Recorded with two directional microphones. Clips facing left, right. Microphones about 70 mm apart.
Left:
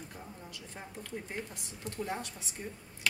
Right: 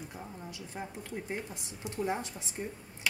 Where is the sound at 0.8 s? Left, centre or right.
Centre.